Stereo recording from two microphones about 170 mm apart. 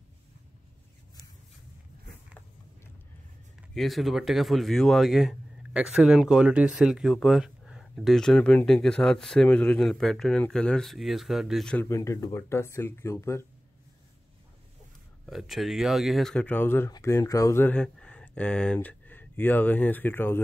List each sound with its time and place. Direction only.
3.7 s speech: centre (ahead or behind)
11.9 s speech: 20° left (ahead or behind)
15.2 s speech: centre (ahead or behind)